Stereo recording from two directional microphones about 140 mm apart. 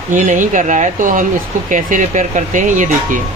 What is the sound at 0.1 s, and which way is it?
Speech, 65° right (ahead or behind).